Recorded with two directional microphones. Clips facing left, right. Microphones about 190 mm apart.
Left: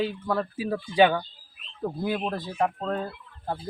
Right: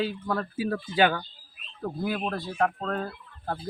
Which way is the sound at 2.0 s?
20° left (ahead or behind).